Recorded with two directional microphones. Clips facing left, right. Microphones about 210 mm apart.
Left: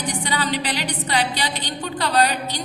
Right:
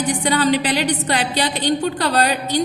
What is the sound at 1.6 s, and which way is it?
A woman's voice, 45° right (ahead or behind).